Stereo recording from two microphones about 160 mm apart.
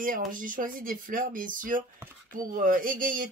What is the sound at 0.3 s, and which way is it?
Speech, 60° right (ahead or behind).